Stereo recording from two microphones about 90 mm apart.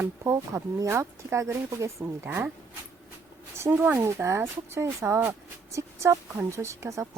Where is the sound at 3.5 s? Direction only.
30° right (ahead or behind).